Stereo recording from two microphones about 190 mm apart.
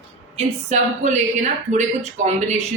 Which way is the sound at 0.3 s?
40° right (ahead or behind).